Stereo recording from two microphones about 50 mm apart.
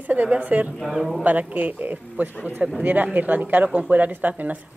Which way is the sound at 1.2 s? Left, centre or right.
Right.